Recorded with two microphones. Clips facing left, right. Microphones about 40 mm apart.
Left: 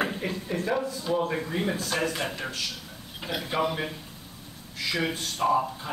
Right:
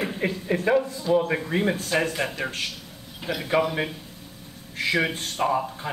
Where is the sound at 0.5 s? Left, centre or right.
Right.